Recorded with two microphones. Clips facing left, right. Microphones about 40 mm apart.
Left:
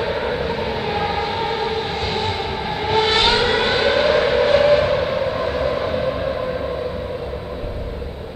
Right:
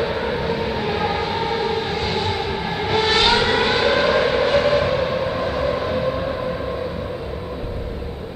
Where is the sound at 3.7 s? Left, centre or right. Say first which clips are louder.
Left 1 dB; centre.